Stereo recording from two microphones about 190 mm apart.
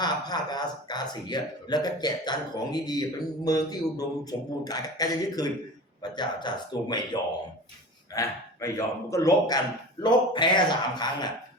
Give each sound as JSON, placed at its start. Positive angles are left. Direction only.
{"t": 0.0, "sound": "a man's voice", "side_deg": 20}